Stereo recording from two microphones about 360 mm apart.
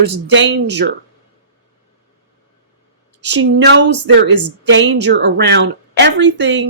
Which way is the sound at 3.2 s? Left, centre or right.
Right.